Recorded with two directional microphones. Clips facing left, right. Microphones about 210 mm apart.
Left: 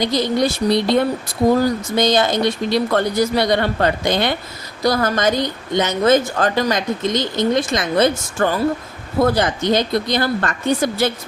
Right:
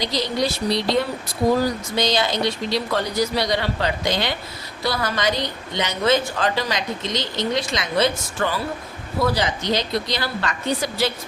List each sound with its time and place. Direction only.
0.0 s speech: 50° left (ahead or behind)